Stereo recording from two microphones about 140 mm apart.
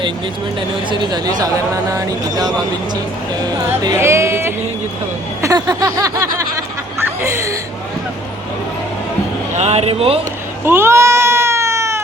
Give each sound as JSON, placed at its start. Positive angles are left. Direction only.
{"t": 0.9, "sound": "speech", "side_deg": -30}
{"t": 3.9, "sound": "speech", "side_deg": -20}
{"t": 5.4, "sound": "a sound", "side_deg": -25}
{"t": 9.6, "sound": "speech", "side_deg": -50}
{"t": 10.7, "sound": "cat", "side_deg": -20}